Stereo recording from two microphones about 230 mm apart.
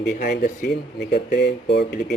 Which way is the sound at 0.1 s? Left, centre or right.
Left.